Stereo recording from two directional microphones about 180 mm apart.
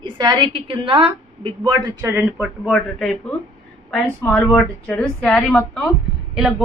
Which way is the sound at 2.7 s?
5° left (ahead or behind).